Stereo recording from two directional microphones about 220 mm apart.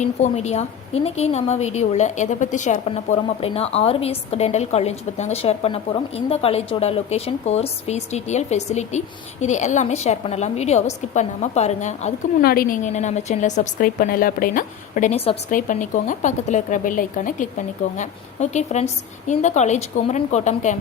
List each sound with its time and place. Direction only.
0.0 s a woman's voice: 30° left (ahead or behind)